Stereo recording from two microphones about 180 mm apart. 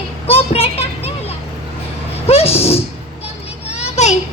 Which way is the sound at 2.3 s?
35° left (ahead or behind).